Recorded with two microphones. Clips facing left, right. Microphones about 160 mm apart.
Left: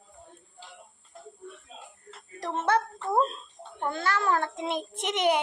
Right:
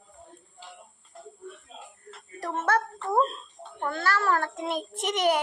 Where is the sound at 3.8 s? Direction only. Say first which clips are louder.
Right 1 dB; 20° left (ahead or behind).